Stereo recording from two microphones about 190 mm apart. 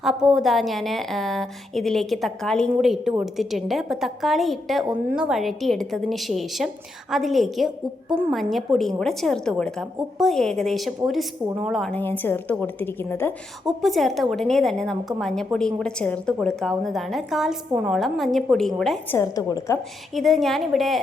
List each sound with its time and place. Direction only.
0.0 s a woman's voice: 5° right (ahead or behind); by 13.3 s 10° left (ahead or behind)
13.7 s a woman's voice: centre (ahead or behind)
19.1 s a woman's voice: 20° left (ahead or behind)
20.1 s a woman's voice: centre (ahead or behind)